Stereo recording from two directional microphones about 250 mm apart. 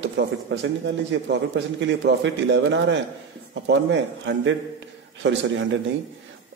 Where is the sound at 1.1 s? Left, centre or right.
Right.